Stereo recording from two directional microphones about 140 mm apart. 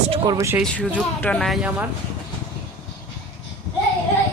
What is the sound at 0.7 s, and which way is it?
Speech, 10° left (ahead or behind).